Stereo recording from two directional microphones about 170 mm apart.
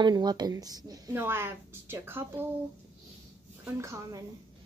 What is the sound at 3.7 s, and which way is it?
Speech, 15° right (ahead or behind).